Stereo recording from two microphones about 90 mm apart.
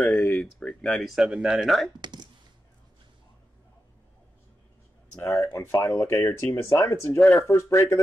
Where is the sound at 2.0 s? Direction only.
55° right (ahead or behind).